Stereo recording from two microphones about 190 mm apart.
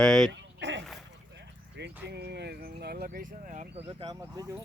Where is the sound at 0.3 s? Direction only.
70° right (ahead or behind); by 3.7 s 45° right (ahead or behind).